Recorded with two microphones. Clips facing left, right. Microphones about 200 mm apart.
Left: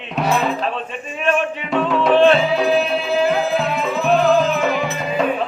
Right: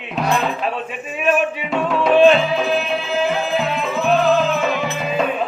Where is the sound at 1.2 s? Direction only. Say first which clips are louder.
Right 1 dB; 5° right (ahead or behind).